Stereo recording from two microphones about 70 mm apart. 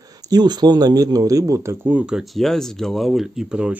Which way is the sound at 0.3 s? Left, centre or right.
Right.